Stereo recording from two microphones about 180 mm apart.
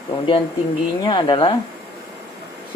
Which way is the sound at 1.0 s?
25° left (ahead or behind).